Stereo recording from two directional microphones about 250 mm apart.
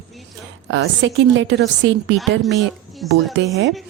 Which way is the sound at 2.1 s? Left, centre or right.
Centre.